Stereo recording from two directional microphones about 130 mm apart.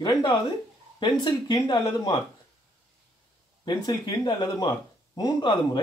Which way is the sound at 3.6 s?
35° left (ahead or behind).